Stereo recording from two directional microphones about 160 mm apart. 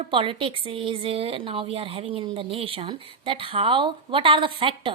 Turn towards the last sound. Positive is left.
turn(degrees=-35)  # may be behind; listen again after turning